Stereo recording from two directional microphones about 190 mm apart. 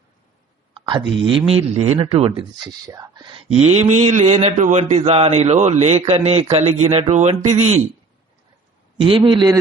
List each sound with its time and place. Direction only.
0.7 s speech: 25° right (ahead or behind)
9.0 s speech: 25° right (ahead or behind)